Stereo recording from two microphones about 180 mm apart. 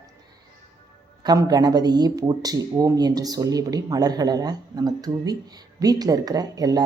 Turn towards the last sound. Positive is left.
turn(degrees=-20)  # may be behind; listen again after turning